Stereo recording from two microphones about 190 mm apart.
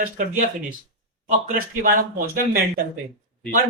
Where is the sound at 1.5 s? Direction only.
45° right (ahead or behind).